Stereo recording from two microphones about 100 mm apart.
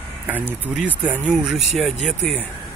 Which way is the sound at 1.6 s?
Centre (ahead or behind).